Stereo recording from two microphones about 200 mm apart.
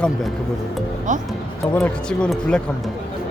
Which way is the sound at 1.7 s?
5° left (ahead or behind).